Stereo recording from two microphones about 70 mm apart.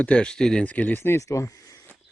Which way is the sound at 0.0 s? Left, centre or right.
Centre.